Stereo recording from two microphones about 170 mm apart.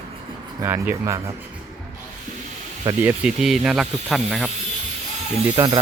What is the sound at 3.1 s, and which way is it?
Speech, 5° right (ahead or behind).